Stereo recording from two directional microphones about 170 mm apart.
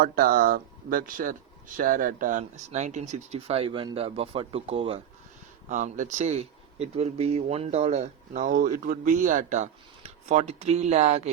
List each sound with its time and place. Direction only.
0.0 s speech: 60° right (ahead or behind); by 5.0 s 35° right (ahead or behind)
5.6 s speech: 45° right (ahead or behind)